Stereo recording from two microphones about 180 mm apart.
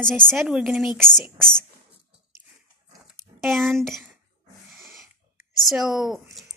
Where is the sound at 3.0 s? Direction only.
Centre (ahead or behind).